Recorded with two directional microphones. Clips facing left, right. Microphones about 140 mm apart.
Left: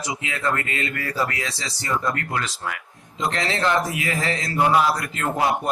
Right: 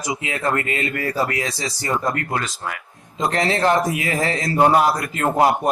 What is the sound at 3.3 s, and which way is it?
Speech, 25° right (ahead or behind).